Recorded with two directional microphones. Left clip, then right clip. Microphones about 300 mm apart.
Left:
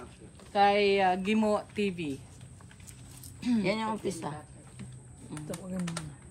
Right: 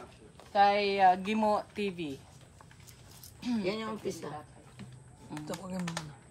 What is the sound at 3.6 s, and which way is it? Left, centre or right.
Speech, centre.